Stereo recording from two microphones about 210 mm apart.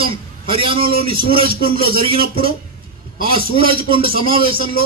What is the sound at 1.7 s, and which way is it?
Speech, 25° right (ahead or behind).